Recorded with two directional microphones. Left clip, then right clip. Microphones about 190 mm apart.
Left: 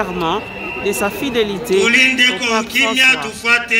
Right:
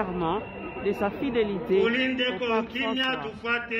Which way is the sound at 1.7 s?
55° left (ahead or behind).